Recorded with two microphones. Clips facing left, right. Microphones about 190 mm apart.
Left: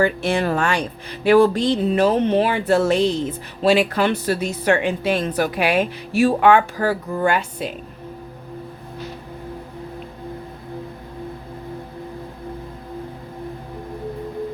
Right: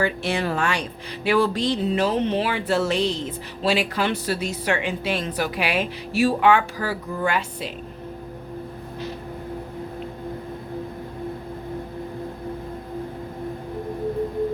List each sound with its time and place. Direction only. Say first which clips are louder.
0.0 s speech: left 4 dB; 50° left (ahead or behind)